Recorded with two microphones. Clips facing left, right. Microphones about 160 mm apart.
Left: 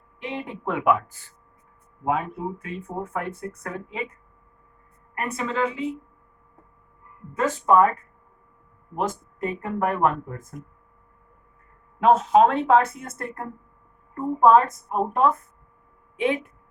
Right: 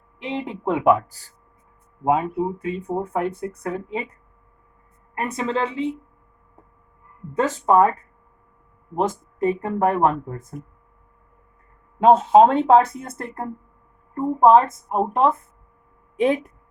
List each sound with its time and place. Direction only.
0.2 s speech: 25° right (ahead or behind)
2.6 s speech: 30° right (ahead or behind)
5.1 s speech: 30° right (ahead or behind)
7.3 s speech: 30° right (ahead or behind)
9.0 s speech: 30° right (ahead or behind)
11.9 s speech: 30° right (ahead or behind)
16.1 s speech: 40° right (ahead or behind)